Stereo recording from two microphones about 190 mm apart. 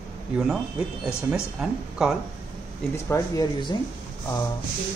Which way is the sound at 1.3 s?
5° right (ahead or behind).